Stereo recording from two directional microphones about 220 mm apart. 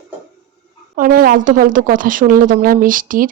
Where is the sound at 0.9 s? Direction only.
40° right (ahead or behind).